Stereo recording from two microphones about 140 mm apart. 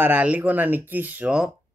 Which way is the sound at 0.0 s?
10° right (ahead or behind).